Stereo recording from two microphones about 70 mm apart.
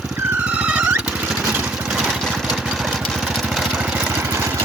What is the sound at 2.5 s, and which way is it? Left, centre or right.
Vehicle, centre.